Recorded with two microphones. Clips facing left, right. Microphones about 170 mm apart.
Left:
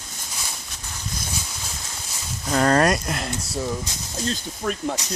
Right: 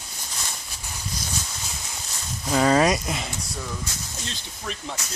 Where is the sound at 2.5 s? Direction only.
Centre (ahead or behind).